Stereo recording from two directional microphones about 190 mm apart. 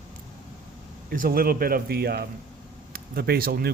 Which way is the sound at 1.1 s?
50° right (ahead or behind).